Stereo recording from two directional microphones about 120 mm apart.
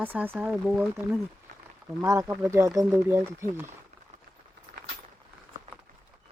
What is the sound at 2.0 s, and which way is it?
Speech, 25° right (ahead or behind).